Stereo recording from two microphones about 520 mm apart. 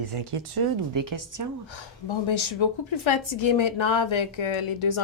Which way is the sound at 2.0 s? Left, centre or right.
Left.